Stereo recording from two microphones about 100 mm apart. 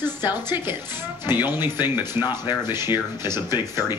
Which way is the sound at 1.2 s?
20° right (ahead or behind).